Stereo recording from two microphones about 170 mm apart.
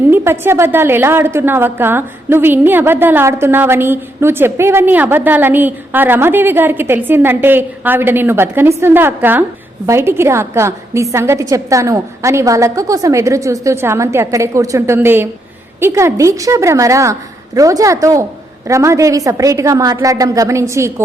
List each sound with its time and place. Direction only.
0.1 s a woman's voice: 15° right (ahead or behind)